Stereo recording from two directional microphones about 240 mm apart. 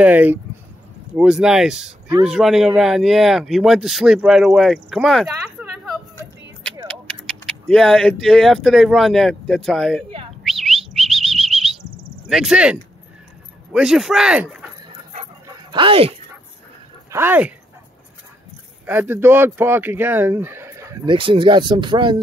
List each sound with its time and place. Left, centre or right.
0.0 s speech: centre
7.4 s speech: centre
10.4 s bird: centre
12.3 s speech: centre
15.4 s dog: right
17.1 s speech: centre
18.9 s speech: centre